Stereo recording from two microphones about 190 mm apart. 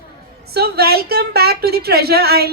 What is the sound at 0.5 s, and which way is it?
A woman's voice, 55° right (ahead or behind).